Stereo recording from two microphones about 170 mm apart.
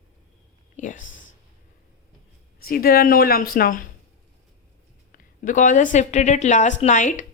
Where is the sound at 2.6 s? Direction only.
60° left (ahead or behind).